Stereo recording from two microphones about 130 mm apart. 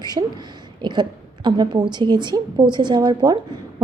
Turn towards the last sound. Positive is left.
turn(degrees=-30)  # may be behind; listen again after turning